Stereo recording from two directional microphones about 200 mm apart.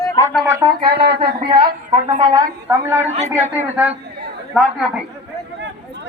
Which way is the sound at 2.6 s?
15° right (ahead or behind).